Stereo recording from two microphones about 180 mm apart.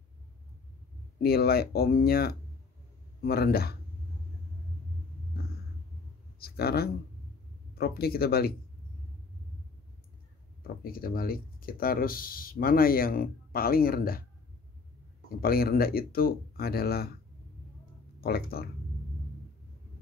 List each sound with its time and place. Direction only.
1.2 s speech: 60° left (ahead or behind)
6.4 s speech: 60° left (ahead or behind)
10.8 s speech: 55° left (ahead or behind)
15.4 s speech: 55° left (ahead or behind)
18.2 s speech: 55° left (ahead or behind)